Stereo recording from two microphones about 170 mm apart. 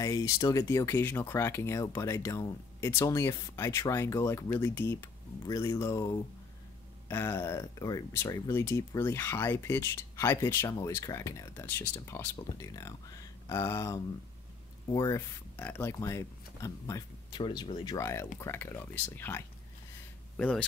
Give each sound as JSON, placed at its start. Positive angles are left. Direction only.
{"t": 0.0, "sound": "speech", "side_deg": 20}